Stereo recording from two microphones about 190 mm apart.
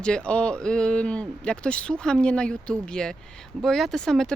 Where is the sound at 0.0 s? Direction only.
5° left (ahead or behind).